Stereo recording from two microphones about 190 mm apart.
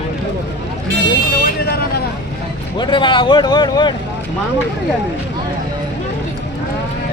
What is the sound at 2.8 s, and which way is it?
Speech, 25° left (ahead or behind).